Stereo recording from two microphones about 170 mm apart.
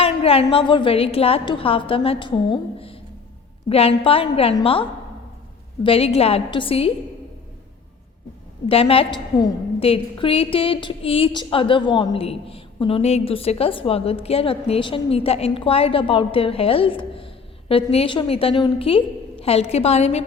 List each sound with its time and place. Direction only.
0.0 s a woman's voice: 35° left (ahead or behind)
8.7 s a woman's voice: 35° left (ahead or behind)